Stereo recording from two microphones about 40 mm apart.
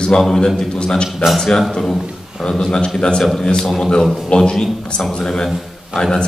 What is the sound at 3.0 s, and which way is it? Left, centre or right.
Speech, left.